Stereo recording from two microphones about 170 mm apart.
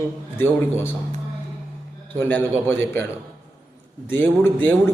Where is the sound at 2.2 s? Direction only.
15° left (ahead or behind).